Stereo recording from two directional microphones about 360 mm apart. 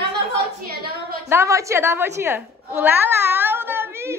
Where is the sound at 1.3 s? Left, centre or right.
Centre.